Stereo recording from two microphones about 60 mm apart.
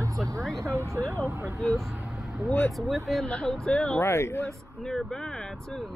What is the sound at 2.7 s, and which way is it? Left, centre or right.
Speech, centre.